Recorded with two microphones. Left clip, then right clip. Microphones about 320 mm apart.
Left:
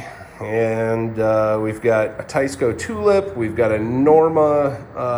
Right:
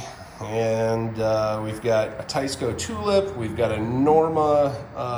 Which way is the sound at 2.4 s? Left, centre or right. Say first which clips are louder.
Left 8 dB; centre.